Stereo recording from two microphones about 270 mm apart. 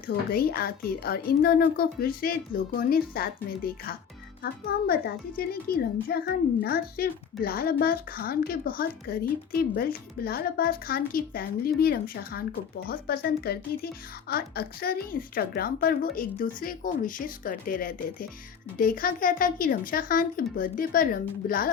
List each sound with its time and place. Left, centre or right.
0.3 s a child's voice: left